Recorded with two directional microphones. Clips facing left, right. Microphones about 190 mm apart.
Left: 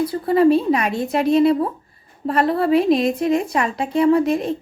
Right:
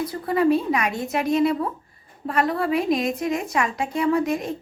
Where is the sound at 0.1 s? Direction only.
30° left (ahead or behind).